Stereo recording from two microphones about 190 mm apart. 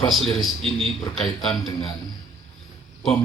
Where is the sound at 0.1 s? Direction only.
Centre (ahead or behind).